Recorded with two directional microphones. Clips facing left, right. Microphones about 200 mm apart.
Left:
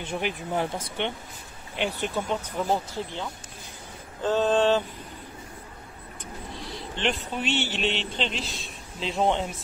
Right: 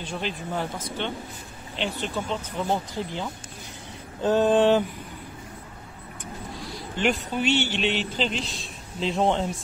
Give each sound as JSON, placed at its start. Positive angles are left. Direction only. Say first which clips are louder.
{"t": 0.0, "sound": "speech", "louder": "left 1 dB", "side_deg": 20}
{"t": 1.8, "sound": "speech", "louder": "left 1 dB", "side_deg": 15}
{"t": 4.2, "sound": "a sound", "louder": "right 3 dB", "side_deg": -15}
{"t": 6.5, "sound": "a man's voice", "louder": "right 1 dB", "side_deg": 0}